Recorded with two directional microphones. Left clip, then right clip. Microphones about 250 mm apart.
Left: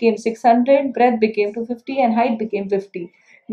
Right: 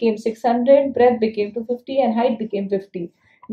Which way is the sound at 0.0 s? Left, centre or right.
Right.